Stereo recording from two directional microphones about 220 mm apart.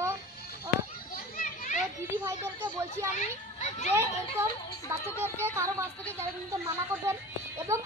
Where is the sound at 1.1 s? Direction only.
40° left (ahead or behind).